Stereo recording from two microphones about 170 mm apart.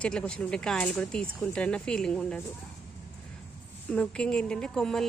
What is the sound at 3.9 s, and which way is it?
Speech, 5° left (ahead or behind).